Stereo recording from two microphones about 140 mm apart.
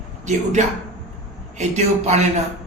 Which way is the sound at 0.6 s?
55° right (ahead or behind).